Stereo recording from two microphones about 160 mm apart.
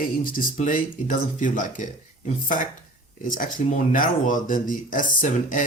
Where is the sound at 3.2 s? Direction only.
55° left (ahead or behind).